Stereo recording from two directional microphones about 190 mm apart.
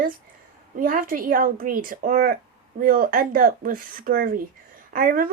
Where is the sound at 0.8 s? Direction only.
45° right (ahead or behind).